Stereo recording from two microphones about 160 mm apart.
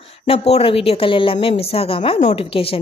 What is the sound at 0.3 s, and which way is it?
A woman's voice, 40° left (ahead or behind).